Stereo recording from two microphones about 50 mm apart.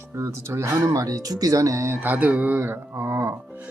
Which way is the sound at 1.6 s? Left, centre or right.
Right.